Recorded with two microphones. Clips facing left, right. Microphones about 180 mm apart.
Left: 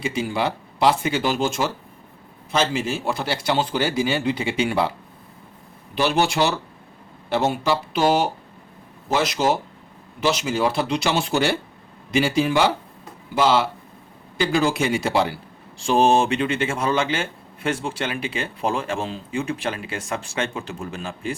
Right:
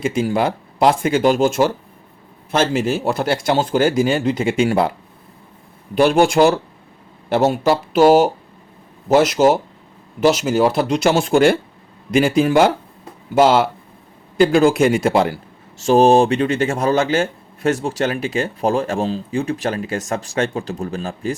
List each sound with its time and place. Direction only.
0.0 s speech: 45° right (ahead or behind)
15.8 s speech: 40° right (ahead or behind)